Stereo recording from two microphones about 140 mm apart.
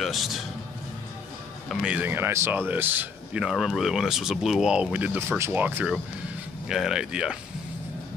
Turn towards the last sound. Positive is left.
turn(degrees=-5)  # may be behind; listen again after turning